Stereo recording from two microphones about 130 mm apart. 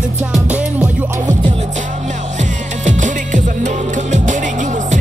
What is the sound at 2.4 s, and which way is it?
Music, 70° right (ahead or behind).